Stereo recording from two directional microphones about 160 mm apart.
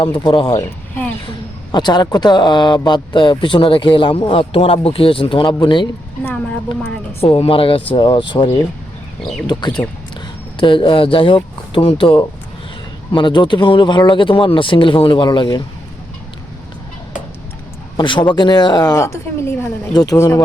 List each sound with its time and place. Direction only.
0.3 s speech: 25° left (ahead or behind)
1.7 s speech: 25° left (ahead or behind)
7.2 s speech: 35° left (ahead or behind)
17.9 s speech: 30° left (ahead or behind)